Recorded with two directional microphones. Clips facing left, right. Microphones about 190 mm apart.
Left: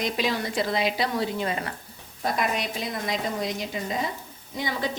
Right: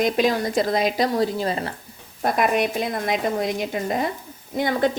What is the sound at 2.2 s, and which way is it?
A woman's voice, 55° right (ahead or behind).